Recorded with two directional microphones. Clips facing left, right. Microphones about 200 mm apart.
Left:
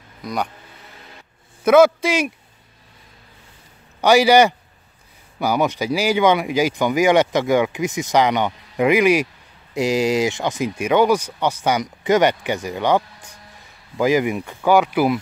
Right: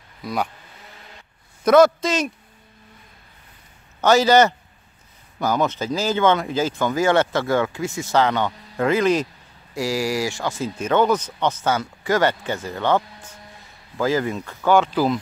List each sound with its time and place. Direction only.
0.2 s speech: centre (ahead or behind)
1.6 s speech: 5° left (ahead or behind)
4.0 s speech: 10° left (ahead or behind)